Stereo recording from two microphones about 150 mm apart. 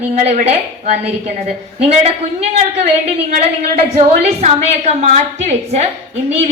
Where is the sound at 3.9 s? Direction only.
45° right (ahead or behind).